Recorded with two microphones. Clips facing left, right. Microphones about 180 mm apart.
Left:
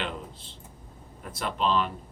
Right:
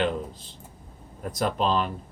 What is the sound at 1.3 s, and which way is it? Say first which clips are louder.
Speech: right 2 dB; 40° right (ahead or behind).